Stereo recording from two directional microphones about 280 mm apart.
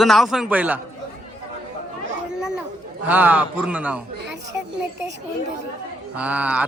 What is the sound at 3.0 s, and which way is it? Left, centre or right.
Speech, centre.